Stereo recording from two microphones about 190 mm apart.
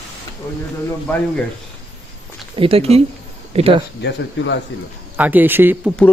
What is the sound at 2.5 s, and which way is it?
Speech, 30° right (ahead or behind).